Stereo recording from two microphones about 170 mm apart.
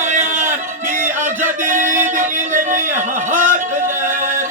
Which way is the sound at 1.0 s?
50° right (ahead or behind).